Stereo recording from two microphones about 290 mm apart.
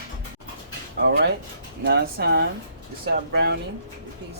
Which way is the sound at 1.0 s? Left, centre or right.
Right.